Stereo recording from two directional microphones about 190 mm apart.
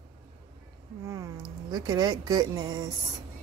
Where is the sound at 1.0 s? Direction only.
20° right (ahead or behind).